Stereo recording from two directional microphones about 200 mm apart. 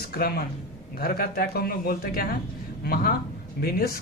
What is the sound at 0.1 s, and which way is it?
Speech, 50° left (ahead or behind).